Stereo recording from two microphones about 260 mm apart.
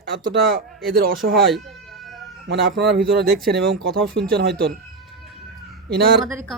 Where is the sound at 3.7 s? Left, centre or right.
Centre.